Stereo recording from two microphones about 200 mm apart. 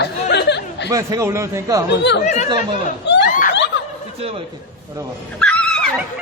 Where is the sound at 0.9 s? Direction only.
15° right (ahead or behind).